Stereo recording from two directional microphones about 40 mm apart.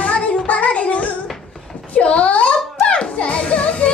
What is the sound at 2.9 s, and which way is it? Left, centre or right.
Music, left.